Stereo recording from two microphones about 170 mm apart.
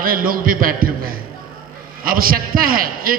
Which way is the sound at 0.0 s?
55° right (ahead or behind).